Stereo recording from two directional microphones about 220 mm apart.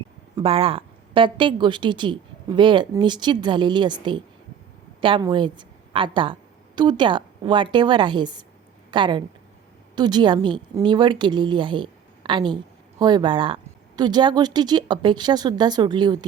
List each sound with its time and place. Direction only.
0.3 s a woman's voice: 25° right (ahead or behind)